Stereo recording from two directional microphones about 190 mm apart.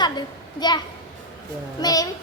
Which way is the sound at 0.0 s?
20° left (ahead or behind).